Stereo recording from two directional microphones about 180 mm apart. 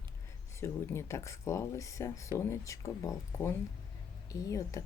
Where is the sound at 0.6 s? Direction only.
15° left (ahead or behind).